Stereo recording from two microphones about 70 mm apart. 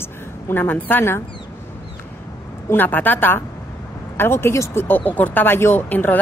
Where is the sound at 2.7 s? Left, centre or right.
Left.